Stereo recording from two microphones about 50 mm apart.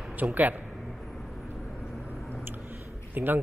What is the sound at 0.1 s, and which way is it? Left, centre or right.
Speech, right.